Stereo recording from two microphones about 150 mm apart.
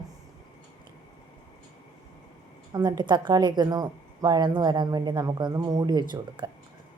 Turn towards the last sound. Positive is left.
turn(degrees=-30)  # may be behind; listen again after turning